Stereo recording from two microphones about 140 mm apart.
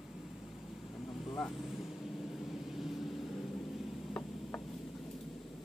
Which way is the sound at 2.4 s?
Centre (ahead or behind).